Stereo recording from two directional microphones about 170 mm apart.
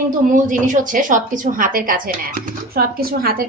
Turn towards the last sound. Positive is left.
turn(degrees=-60)  # may be behind; listen again after turning